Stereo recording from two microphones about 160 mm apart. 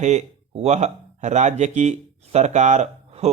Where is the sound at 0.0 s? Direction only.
45° right (ahead or behind).